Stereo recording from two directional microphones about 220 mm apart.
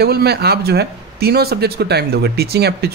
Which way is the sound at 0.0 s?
45° right (ahead or behind).